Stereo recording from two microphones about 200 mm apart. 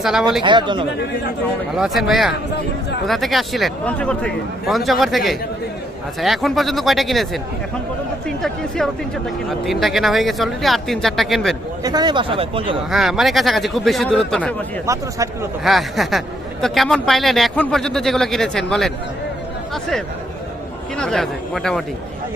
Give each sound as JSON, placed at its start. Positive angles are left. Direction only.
{"t": 0.0, "sound": "a man's voice", "side_deg": 0}
{"t": 0.4, "sound": "speech", "side_deg": -25}
{"t": 1.7, "sound": "a man's voice", "side_deg": 0}
{"t": 8.4, "sound": "a man's voice", "side_deg": 0}
{"t": 11.8, "sound": "speech", "side_deg": -20}
{"t": 12.9, "sound": "a man's voice", "side_deg": 0}
{"t": 14.9, "sound": "speech", "side_deg": -15}
{"t": 15.6, "sound": "a man's voice", "side_deg": 0}
{"t": 20.9, "sound": "a man's voice", "side_deg": 5}